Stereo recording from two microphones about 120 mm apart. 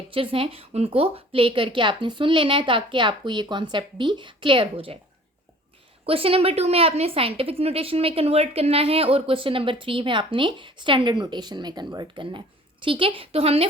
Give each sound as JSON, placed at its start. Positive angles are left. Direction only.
{"t": 0.1, "sound": "a woman's voice", "side_deg": -50}
{"t": 6.1, "sound": "a woman's voice", "side_deg": -50}